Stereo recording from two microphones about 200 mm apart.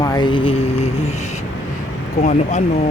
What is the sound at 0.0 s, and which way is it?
Mantra, 20° left (ahead or behind).